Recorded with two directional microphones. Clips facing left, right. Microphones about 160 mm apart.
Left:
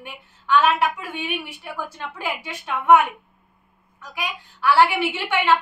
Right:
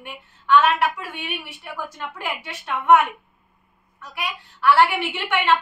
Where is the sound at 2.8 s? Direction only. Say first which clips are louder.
Left 1 dB; 10° left (ahead or behind).